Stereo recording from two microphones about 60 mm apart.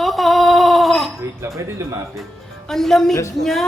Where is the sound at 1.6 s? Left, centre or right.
Right.